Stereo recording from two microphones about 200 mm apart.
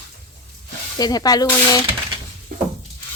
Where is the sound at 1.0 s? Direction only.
20° left (ahead or behind).